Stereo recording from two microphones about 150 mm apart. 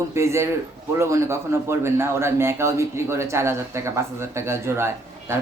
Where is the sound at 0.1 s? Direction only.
20° right (ahead or behind).